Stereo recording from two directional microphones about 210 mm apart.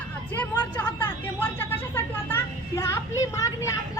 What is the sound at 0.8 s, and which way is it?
A woman's voice, 10° left (ahead or behind).